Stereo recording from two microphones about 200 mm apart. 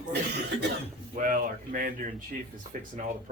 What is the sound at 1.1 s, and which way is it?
Speech, 40° right (ahead or behind).